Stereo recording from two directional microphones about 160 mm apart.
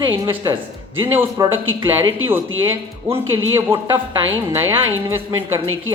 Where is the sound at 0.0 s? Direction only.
30° right (ahead or behind).